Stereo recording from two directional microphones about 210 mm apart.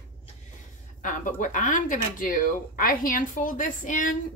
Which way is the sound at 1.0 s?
35° left (ahead or behind).